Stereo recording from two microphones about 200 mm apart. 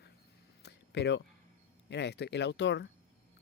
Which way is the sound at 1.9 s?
60° left (ahead or behind).